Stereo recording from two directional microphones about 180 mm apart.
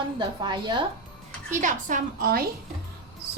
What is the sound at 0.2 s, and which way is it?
Speech, 25° right (ahead or behind).